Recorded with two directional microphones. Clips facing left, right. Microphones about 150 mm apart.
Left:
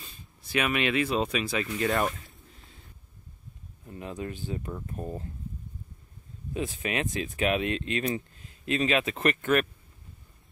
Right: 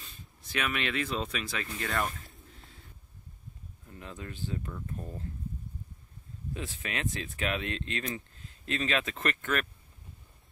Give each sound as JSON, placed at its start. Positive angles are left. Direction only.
{"t": 0.4, "sound": "speech", "side_deg": 15}
{"t": 3.8, "sound": "speech", "side_deg": 15}
{"t": 6.5, "sound": "speech", "side_deg": 15}